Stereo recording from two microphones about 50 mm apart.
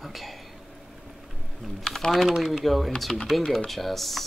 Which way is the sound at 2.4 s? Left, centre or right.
Centre.